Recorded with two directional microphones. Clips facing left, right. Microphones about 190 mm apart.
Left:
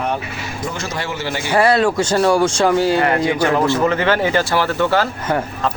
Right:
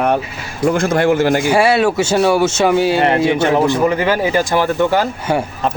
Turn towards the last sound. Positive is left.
turn(degrees=-15)  # may be behind; listen again after turning